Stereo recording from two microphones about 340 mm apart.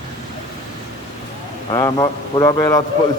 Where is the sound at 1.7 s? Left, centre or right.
Centre.